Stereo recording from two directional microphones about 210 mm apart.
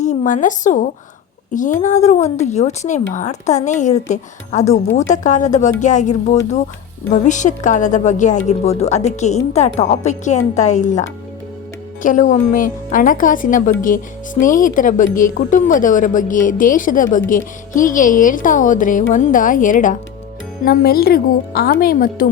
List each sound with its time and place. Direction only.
0.0 s a woman's voice: 35° left (ahead or behind)
12.0 s a woman's voice: 35° left (ahead or behind)